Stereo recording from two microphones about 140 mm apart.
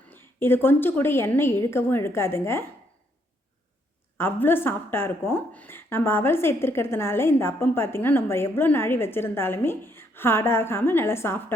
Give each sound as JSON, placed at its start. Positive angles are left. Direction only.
{"t": 0.1, "sound": "speech", "side_deg": 15}
{"t": 4.2, "sound": "speech", "side_deg": 15}